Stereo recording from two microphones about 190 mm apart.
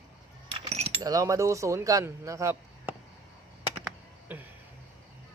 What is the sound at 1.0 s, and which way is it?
Speech, 15° right (ahead or behind).